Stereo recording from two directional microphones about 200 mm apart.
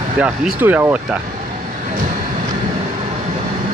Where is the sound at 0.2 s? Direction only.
5° right (ahead or behind).